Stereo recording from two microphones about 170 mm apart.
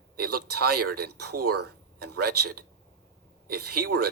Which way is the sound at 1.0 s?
65° right (ahead or behind).